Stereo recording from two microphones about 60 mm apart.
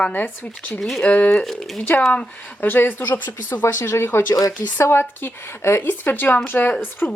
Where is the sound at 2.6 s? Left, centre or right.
Left.